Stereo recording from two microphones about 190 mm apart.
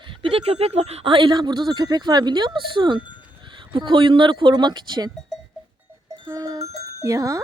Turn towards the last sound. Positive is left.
turn(degrees=-20)  # may be behind; listen again after turning